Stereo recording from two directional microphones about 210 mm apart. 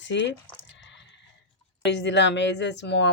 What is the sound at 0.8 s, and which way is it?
Sheep, 60° left (ahead or behind).